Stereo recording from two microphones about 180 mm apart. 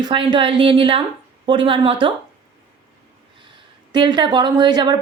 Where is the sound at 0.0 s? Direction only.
25° right (ahead or behind).